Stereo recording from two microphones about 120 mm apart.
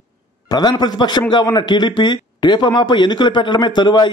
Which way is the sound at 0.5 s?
35° left (ahead or behind).